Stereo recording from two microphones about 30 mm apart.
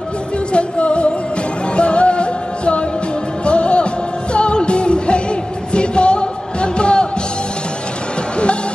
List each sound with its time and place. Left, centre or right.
0.5 s music: left